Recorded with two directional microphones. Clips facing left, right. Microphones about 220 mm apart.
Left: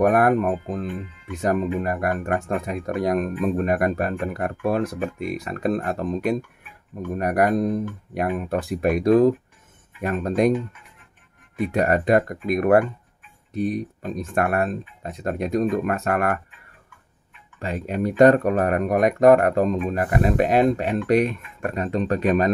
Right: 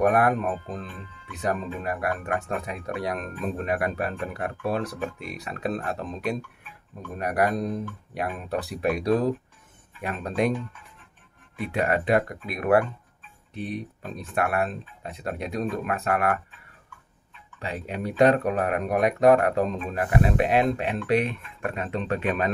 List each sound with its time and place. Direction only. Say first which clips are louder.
1.3 s speech: left 6 dB; 45° left (ahead or behind)
11.6 s speech: left 5 dB; 45° left (ahead or behind)
17.6 s speech: left 6 dB; 45° left (ahead or behind)